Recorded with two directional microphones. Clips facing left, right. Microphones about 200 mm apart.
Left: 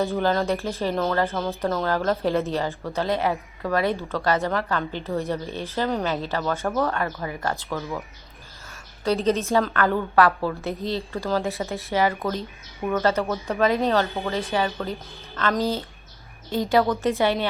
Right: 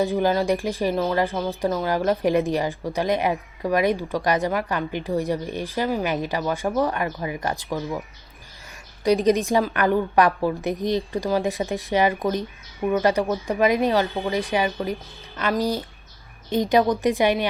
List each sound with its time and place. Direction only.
0.0 s speech: 15° right (ahead or behind)